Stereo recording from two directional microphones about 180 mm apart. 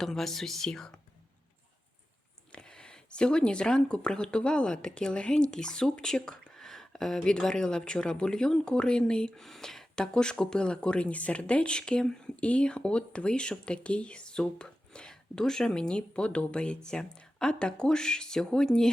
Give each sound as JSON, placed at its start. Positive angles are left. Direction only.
{"t": 0.0, "sound": "speech", "side_deg": 0}
{"t": 2.5, "sound": "speech", "side_deg": 5}